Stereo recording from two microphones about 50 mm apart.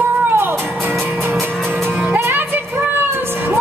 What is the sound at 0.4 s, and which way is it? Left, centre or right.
Music, right.